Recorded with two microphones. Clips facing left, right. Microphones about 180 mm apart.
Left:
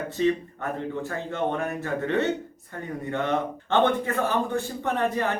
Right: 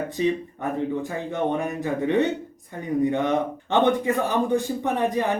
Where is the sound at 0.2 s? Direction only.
15° right (ahead or behind).